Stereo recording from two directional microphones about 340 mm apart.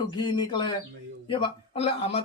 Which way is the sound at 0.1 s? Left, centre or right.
Centre.